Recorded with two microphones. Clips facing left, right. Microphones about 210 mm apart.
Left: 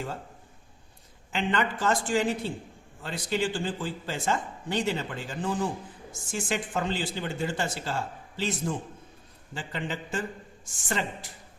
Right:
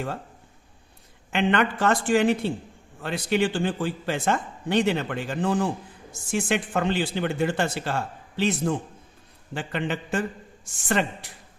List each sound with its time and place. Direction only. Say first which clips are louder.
1.3 s a man's voice: right 5 dB; 65° right (ahead or behind)